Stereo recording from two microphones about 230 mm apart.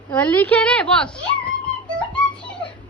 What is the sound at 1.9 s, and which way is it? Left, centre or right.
Music, centre.